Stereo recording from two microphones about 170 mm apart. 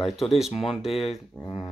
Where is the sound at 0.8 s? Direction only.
35° left (ahead or behind).